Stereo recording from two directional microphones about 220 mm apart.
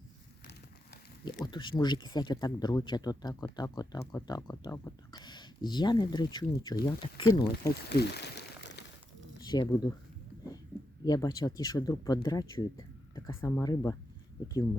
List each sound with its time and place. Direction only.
1.2 s speech: 20° left (ahead or behind)
7.9 s crumpling: 45° left (ahead or behind)
9.5 s speech: 20° left (ahead or behind)
11.0 s speech: 15° left (ahead or behind)